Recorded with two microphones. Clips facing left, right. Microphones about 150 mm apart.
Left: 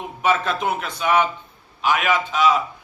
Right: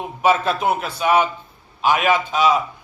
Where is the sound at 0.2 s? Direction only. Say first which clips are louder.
Right 3 dB; 30° right (ahead or behind).